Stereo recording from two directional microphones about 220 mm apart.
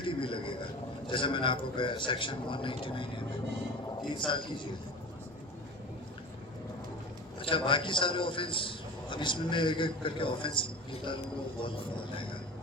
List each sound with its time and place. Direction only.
0.0 s a man's voice: 25° left (ahead or behind)
7.3 s a man's voice: 25° left (ahead or behind)